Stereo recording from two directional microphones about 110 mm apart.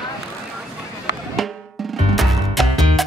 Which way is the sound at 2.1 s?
Centre (ahead or behind).